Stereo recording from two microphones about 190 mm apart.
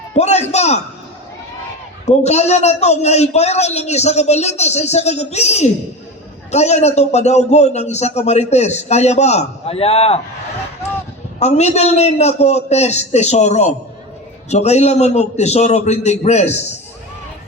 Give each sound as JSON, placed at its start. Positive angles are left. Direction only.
{"t": 0.1, "sound": "a man's voice", "side_deg": 35}
{"t": 2.0, "sound": "a man's voice", "side_deg": 35}
{"t": 11.3, "sound": "a man's voice", "side_deg": 35}